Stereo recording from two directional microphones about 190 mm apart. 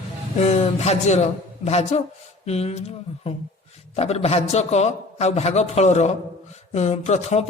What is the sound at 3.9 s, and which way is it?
A man's voice, 30° left (ahead or behind).